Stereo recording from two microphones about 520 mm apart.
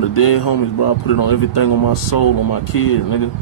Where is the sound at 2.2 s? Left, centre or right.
Left.